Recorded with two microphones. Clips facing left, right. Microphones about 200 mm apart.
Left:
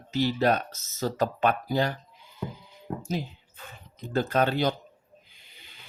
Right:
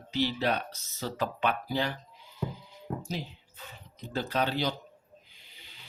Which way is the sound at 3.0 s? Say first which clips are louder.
Left 5 dB; 50° left (ahead or behind).